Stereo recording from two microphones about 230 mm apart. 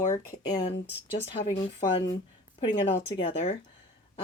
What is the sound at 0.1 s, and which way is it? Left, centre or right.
Speech, centre.